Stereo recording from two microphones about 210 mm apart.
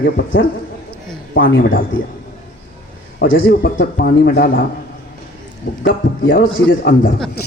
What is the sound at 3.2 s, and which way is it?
A man's voice, 55° left (ahead or behind).